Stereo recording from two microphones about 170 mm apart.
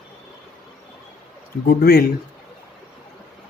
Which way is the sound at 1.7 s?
60° left (ahead or behind).